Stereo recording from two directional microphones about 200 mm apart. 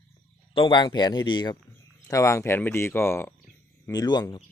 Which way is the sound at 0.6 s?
25° left (ahead or behind).